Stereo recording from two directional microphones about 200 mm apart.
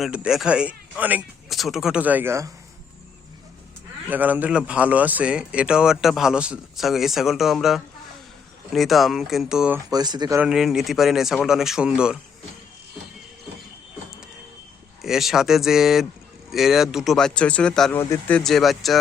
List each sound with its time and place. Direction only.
0.0 s speech: 5° right (ahead or behind)
4.1 s speech: 10° right (ahead or behind)
9.9 s speech: 20° right (ahead or behind)
10.4 s speech: 5° right (ahead or behind)
15.0 s speech: centre (ahead or behind)